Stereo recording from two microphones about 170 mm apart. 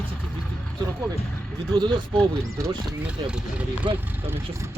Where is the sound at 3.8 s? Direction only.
30° right (ahead or behind).